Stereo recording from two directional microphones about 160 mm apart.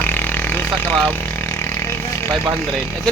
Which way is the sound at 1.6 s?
15° left (ahead or behind).